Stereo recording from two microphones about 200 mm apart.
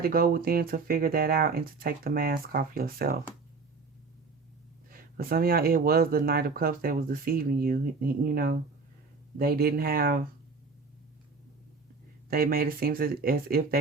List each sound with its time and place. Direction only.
0.0 s speech: 50° right (ahead or behind)
4.9 s speech: 45° right (ahead or behind)
12.3 s speech: 50° right (ahead or behind)